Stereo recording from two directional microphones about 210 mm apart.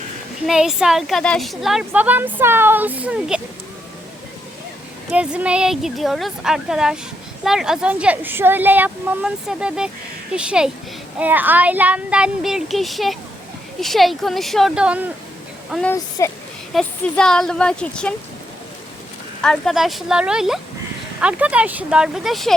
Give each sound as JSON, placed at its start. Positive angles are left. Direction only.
{"t": 0.4, "sound": "a woman's voice", "side_deg": 0}
{"t": 5.1, "sound": "a woman's voice", "side_deg": -5}
{"t": 15.7, "sound": "a woman's voice", "side_deg": 5}
{"t": 16.0, "sound": "speech", "side_deg": 15}
{"t": 16.7, "sound": "a woman's voice", "side_deg": 5}
{"t": 19.4, "sound": "a woman's voice", "side_deg": 5}